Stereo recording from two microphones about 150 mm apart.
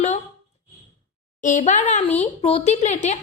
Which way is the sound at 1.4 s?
55° left (ahead or behind).